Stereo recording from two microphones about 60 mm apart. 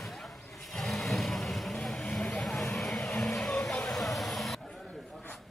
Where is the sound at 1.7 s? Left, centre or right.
Centre.